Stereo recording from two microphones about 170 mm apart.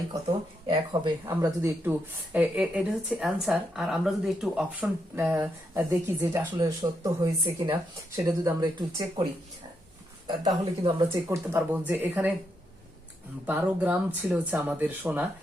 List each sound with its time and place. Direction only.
0.7 s speech: 25° right (ahead or behind)
1.3 s speech: 15° right (ahead or behind)
10.4 s speech: 20° right (ahead or behind)
13.5 s speech: 10° right (ahead or behind)